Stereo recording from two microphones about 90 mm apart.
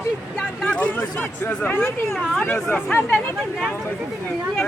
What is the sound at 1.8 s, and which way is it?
Speech, 25° left (ahead or behind).